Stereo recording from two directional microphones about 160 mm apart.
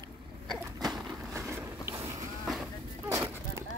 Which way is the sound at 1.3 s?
15° right (ahead or behind).